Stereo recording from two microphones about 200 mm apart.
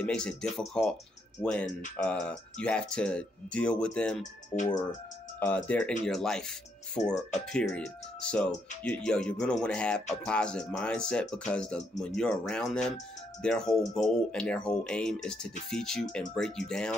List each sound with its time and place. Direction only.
0.0 s speech: 5° left (ahead or behind)
4.5 s speech: 35° left (ahead or behind)
5.4 s speech: 5° left (ahead or behind)
7.0 s speech: 15° left (ahead or behind)
7.5 s speech: 5° left (ahead or behind)